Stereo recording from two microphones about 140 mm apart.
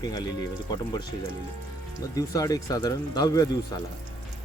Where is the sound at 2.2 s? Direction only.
25° left (ahead or behind).